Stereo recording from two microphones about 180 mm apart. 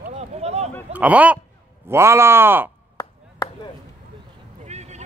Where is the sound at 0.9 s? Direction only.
10° right (ahead or behind).